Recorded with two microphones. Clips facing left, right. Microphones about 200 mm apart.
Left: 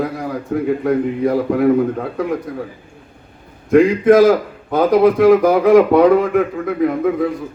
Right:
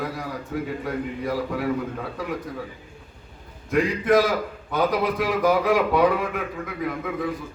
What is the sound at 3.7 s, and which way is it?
A man's voice, 50° left (ahead or behind).